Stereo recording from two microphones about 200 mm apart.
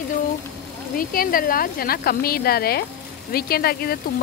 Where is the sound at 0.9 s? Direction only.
45° left (ahead or behind).